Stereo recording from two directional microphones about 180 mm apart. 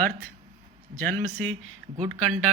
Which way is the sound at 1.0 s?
45° right (ahead or behind).